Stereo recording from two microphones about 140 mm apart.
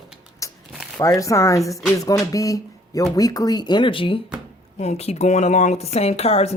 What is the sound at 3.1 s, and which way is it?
Speech, 25° left (ahead or behind).